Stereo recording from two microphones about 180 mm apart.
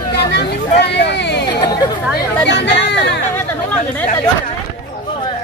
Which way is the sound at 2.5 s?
75° left (ahead or behind).